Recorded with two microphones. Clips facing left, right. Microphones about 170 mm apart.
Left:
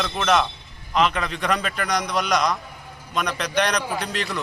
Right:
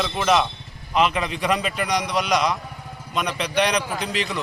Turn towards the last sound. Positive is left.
turn(degrees=0)  # may be behind; listen again after turning